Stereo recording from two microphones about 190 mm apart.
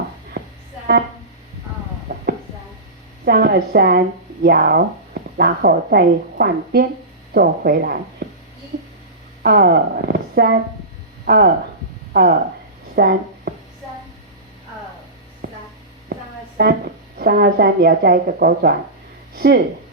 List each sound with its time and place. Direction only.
2.1 s a sound: 50° right (ahead or behind)
3.2 s a woman's voice: 55° right (ahead or behind)
9.4 s a woman's voice: 55° right (ahead or behind)
16.6 s a woman's voice: 55° right (ahead or behind)